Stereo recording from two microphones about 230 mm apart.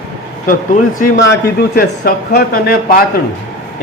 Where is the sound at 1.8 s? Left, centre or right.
Left.